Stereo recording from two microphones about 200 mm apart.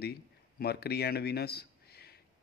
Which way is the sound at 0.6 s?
55° left (ahead or behind).